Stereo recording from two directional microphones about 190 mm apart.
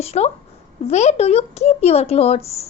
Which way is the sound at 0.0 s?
35° left (ahead or behind).